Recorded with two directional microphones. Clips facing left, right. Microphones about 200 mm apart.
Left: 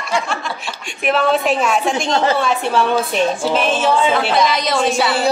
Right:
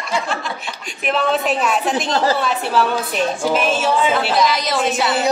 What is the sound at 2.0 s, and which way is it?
Speech, 25° left (ahead or behind).